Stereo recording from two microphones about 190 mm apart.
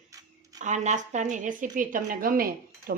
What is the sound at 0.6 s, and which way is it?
A woman's voice, 40° right (ahead or behind).